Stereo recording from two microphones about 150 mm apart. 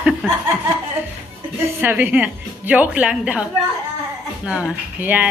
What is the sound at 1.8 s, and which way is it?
A woman's voice, 10° right (ahead or behind).